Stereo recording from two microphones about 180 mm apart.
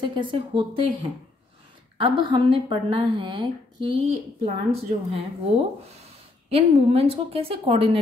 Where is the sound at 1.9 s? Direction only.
30° right (ahead or behind).